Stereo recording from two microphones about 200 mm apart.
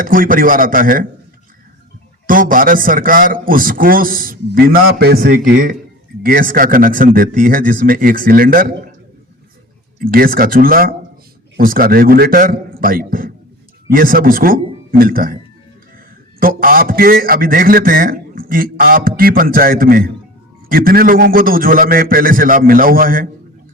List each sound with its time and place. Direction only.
0.0 s a man's voice: 45° right (ahead or behind)
2.2 s a man's voice: 45° right (ahead or behind)
10.0 s a man's voice: 45° right (ahead or behind)
16.4 s a man's voice: 45° right (ahead or behind)